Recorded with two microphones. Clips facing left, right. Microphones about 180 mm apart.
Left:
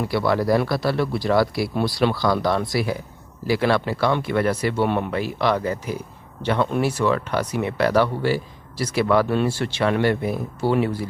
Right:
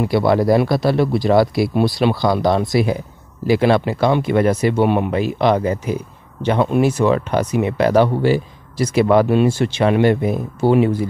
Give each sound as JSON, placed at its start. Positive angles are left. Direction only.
{"t": 0.0, "sound": "speech", "side_deg": -20}